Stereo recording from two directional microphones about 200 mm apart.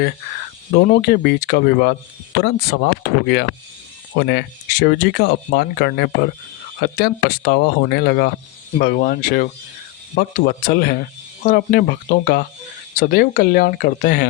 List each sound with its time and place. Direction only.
0.8 s speech: 50° left (ahead or behind)